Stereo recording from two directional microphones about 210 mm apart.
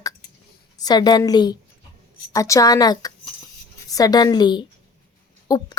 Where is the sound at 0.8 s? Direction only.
20° left (ahead or behind).